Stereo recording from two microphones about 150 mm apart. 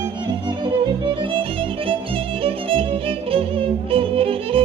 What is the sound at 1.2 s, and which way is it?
Violin, 35° right (ahead or behind).